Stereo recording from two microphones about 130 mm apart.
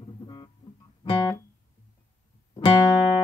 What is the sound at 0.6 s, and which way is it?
Music, 35° left (ahead or behind).